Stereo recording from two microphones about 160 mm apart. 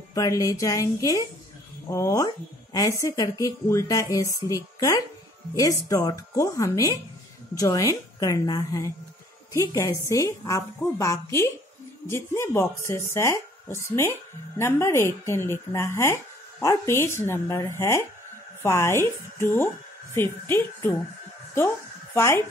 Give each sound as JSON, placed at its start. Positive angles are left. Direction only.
{"t": 0.1, "sound": "speech", "side_deg": 20}
{"t": 22.1, "sound": "speech", "side_deg": 15}